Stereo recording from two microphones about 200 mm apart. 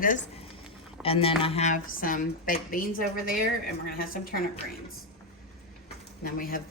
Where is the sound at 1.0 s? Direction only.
30° left (ahead or behind); by 4.4 s 45° left (ahead or behind).